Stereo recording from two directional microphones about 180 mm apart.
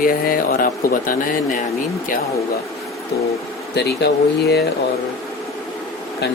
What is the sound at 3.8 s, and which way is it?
Speech, 65° left (ahead or behind).